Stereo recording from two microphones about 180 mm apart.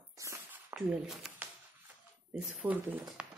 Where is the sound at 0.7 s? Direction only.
5° right (ahead or behind).